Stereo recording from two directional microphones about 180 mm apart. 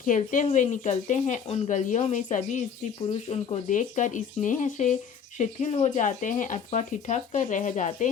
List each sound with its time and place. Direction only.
0.0 s speech: 45° left (ahead or behind)